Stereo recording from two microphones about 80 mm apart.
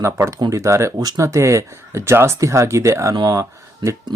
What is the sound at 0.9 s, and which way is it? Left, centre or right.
Speech, right.